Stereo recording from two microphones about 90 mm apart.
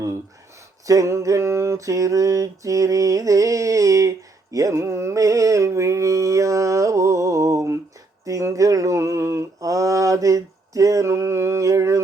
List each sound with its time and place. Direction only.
0.9 s mantra: 35° right (ahead or behind)